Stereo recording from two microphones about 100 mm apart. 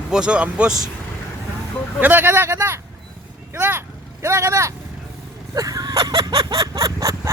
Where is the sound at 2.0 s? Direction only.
20° right (ahead or behind).